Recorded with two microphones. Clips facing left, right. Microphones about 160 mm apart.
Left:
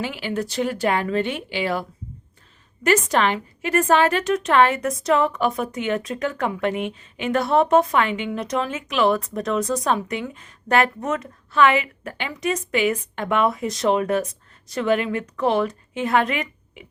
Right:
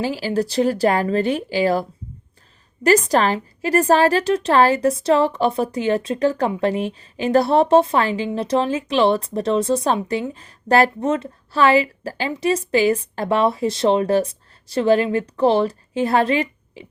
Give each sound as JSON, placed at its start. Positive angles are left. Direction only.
{"t": 0.0, "sound": "a woman's voice", "side_deg": -35}